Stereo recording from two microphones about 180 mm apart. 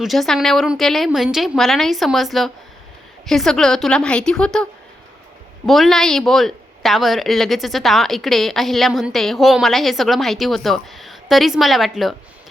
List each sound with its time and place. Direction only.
0.0 s a woman's voice: centre (ahead or behind)